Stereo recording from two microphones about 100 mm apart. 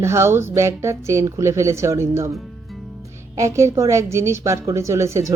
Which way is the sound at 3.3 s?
30° right (ahead or behind).